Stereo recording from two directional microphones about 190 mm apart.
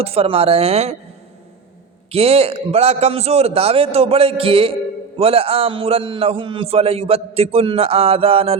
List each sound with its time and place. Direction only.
0.0 s a man's voice: 30° right (ahead or behind)
2.1 s a man's voice: 30° right (ahead or behind)